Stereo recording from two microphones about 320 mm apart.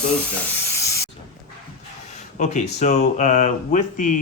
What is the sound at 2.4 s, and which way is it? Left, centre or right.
Speech, left.